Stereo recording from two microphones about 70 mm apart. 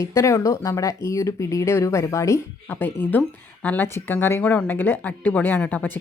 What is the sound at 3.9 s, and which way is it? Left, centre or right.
A woman's voice, left.